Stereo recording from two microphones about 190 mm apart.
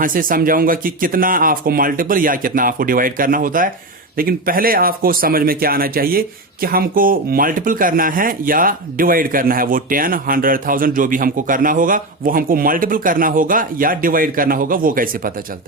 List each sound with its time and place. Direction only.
0.0 s speech: 45° right (ahead or behind)